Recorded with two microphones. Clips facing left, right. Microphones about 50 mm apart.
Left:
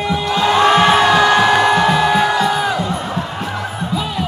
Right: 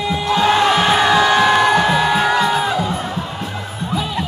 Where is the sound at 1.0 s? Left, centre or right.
Left.